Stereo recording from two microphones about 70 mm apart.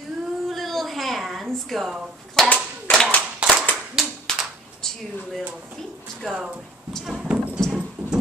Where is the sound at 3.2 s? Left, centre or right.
Centre.